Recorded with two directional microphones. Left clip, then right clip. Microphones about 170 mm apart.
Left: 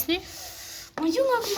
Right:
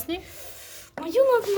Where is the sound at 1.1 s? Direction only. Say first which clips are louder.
Right 4 dB; 40° right (ahead or behind).